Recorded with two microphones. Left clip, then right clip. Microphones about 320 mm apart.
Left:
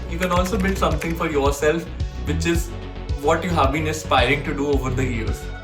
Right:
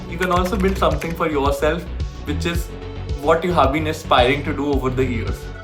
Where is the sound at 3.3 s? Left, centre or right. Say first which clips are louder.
Right 3 dB; centre.